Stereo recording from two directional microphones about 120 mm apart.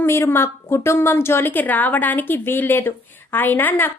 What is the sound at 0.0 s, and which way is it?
A woman's voice, 20° left (ahead or behind).